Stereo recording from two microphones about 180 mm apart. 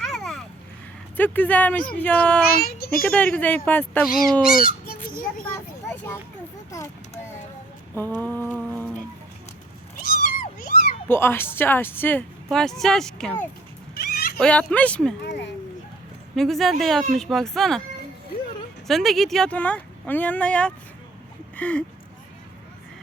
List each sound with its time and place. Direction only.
0.0 s a sound: centre (ahead or behind)
1.1 s a woman's voice: 10° left (ahead or behind)
2.6 s a child's voice: 55° left (ahead or behind)
3.1 s a woman's voice: 10° left (ahead or behind)
5.5 s vehicle: 15° left (ahead or behind)
6.7 s a woman's voice: 15° left (ahead or behind)
7.9 s a woman's voice: 10° left (ahead or behind)
10.2 s cat: 50° left (ahead or behind)
11.1 s a woman's voice: 10° left (ahead or behind)
14.0 s cat: 55° left (ahead or behind)
14.3 s a woman's voice: 5° left (ahead or behind)
15.2 s speech: 70° left (ahead or behind)
16.3 s speech: centre (ahead or behind)
18.9 s a woman's voice: centre (ahead or behind)